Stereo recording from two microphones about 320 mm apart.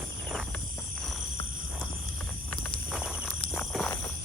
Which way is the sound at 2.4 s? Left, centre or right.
Centre.